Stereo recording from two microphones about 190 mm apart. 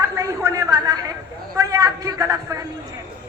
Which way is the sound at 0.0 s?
15° right (ahead or behind).